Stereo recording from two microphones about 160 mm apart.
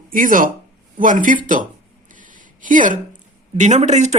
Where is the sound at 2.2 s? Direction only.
55° right (ahead or behind).